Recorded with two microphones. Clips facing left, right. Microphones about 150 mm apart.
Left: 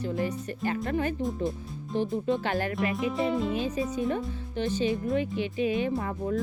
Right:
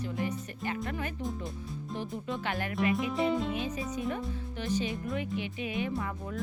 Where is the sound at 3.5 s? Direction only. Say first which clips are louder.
Left 5 dB; 30° left (ahead or behind).